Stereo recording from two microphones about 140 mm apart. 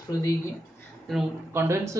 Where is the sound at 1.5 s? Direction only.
20° right (ahead or behind).